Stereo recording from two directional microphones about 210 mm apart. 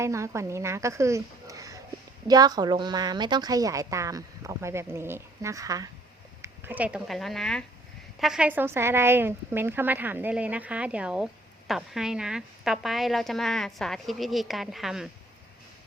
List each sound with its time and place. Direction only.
0.0 s a woman's voice: 15° right (ahead or behind)